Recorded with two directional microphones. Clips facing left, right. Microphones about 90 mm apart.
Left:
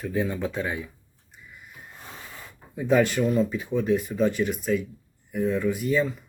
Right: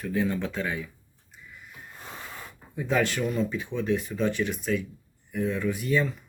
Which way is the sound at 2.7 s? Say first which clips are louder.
Left 5 dB; 5° left (ahead or behind).